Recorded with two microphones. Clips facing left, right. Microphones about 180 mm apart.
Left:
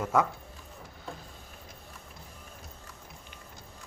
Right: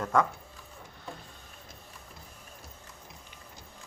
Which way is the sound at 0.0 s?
5° left (ahead or behind).